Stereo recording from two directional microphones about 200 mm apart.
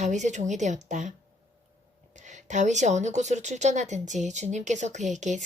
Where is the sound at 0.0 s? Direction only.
35° right (ahead or behind).